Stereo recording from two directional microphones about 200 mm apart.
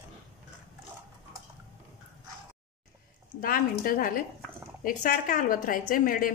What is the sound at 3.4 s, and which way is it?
A woman's voice, 45° left (ahead or behind).